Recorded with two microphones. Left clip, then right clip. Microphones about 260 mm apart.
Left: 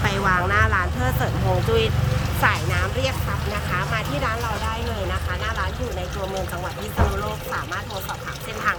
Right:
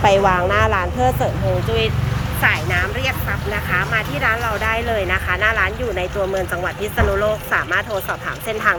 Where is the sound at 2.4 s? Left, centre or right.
Centre.